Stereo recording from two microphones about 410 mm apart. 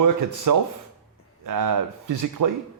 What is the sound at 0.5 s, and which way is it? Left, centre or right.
Speech, right.